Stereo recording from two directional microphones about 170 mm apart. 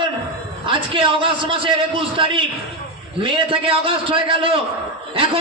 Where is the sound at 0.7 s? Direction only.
30° right (ahead or behind).